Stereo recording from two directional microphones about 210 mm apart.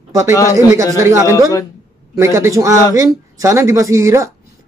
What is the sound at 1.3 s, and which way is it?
Speech, 15° left (ahead or behind).